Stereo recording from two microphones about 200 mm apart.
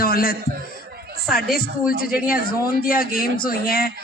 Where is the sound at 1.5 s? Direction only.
45° left (ahead or behind).